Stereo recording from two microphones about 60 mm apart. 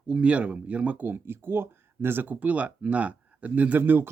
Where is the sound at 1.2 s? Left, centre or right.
Right.